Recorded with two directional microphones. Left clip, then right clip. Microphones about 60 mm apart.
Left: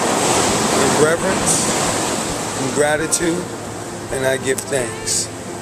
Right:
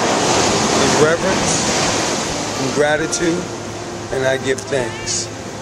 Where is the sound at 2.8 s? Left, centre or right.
Centre.